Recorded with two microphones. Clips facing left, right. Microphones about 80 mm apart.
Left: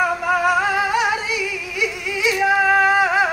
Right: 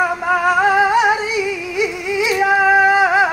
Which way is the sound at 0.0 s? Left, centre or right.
Right.